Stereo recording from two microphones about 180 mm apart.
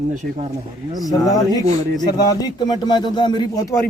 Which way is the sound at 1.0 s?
20° left (ahead or behind).